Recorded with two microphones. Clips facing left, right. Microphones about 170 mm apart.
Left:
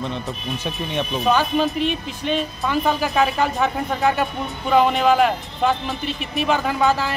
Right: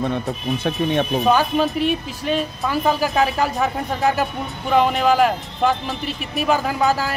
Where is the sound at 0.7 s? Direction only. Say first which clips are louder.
Right 6 dB; 55° right (ahead or behind).